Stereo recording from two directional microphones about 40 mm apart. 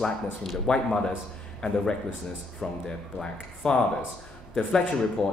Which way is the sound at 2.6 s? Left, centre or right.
Centre.